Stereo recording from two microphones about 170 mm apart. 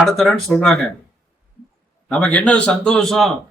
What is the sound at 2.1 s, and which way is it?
A man's voice, 5° left (ahead or behind).